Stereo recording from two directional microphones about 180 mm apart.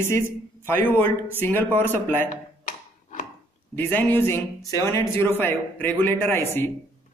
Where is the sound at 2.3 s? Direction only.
45° left (ahead or behind).